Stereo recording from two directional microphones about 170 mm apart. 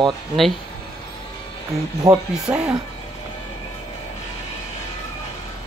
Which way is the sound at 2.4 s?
5° right (ahead or behind).